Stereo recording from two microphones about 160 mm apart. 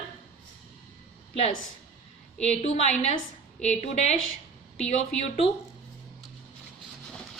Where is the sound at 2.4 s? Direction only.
45° left (ahead or behind).